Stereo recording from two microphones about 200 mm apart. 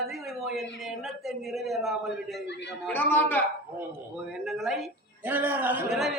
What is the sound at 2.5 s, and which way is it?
Speech, 60° left (ahead or behind).